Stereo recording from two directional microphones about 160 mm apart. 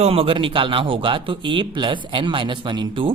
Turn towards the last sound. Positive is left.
turn(degrees=-30)  # may be behind; listen again after turning